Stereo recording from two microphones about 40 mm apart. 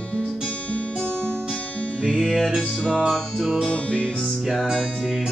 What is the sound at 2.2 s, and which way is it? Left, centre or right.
Music, centre.